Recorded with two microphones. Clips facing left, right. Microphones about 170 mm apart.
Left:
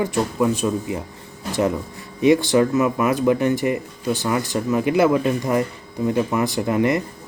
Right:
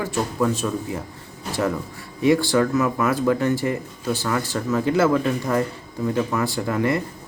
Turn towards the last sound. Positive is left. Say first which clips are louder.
# left 3 dB
turn(degrees=20)  # may be behind; listen again after turning